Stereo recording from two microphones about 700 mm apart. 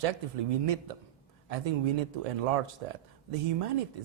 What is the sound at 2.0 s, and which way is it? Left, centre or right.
Speech, right.